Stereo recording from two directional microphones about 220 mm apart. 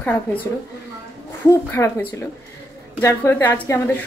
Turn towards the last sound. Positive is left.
turn(degrees=10)  # may be behind; listen again after turning